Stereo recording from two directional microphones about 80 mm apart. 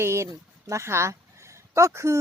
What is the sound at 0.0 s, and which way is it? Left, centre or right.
Speech, right.